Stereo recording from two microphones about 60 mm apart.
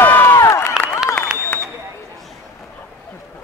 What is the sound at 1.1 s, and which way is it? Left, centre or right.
Applause, left.